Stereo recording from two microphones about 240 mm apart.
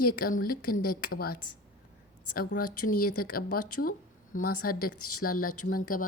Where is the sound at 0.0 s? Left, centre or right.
Left.